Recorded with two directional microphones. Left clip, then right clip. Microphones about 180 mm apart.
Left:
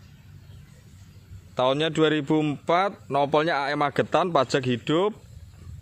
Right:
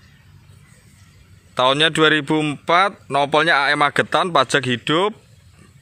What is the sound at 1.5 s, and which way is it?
Speech, centre (ahead or behind).